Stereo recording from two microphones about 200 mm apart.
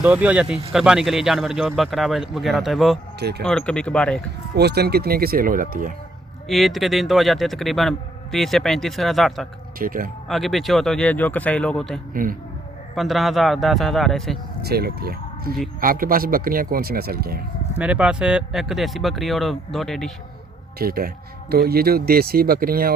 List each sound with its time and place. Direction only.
0.0 s speech: 5° right (ahead or behind)
3.2 s speech: 55° right (ahead or behind)
3.4 s speech: 5° left (ahead or behind)
4.5 s a man's voice: 55° right (ahead or behind)
6.5 s speech: centre (ahead or behind)
9.7 s a man's voice: 45° right (ahead or behind)
10.2 s speech: centre (ahead or behind)
12.1 s a man's voice: 45° right (ahead or behind)
13.0 s speech: centre (ahead or behind)
14.6 s a man's voice: 50° right (ahead or behind)
17.7 s speech: 5° right (ahead or behind)
20.7 s a man's voice: 45° right (ahead or behind)